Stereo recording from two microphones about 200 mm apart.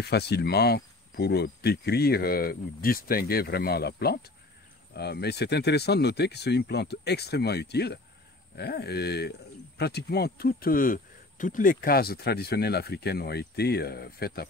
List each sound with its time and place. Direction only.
0.0 s speech: 55° left (ahead or behind)